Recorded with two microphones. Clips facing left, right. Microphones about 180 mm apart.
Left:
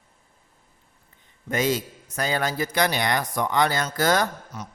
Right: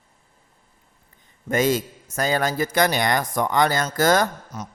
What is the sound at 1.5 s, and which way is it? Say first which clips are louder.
A man's voice: right 3 dB; 50° right (ahead or behind).